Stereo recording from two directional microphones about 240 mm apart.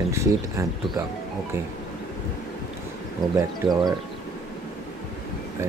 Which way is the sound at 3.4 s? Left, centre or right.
Centre.